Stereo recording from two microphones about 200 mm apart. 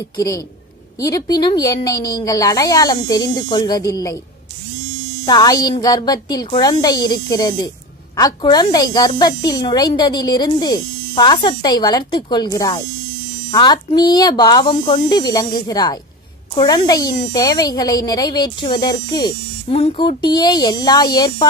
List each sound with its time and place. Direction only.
1.0 s speech: 20° left (ahead or behind)
5.2 s speech: 20° left (ahead or behind)